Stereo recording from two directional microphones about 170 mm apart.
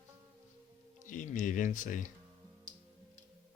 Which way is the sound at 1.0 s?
50° left (ahead or behind).